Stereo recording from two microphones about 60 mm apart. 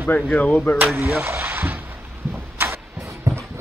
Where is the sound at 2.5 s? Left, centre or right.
Right.